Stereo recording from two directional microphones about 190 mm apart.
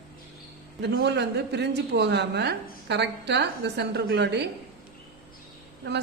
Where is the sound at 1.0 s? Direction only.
65° right (ahead or behind).